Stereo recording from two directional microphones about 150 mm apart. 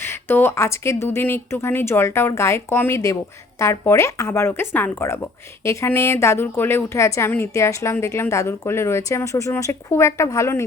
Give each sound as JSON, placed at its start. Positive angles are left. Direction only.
{"t": 0.0, "sound": "speech", "side_deg": 15}